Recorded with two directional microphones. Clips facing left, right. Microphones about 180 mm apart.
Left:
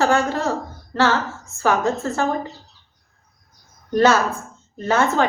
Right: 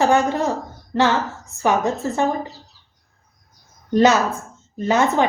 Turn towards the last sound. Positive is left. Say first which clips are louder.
# right 1 dB
turn(degrees=-15)  # may be behind; listen again after turning